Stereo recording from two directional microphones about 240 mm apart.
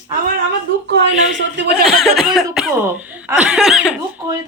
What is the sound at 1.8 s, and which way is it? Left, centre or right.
Speech, centre.